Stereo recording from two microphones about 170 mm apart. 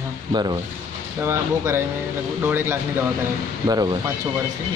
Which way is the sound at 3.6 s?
25° right (ahead or behind).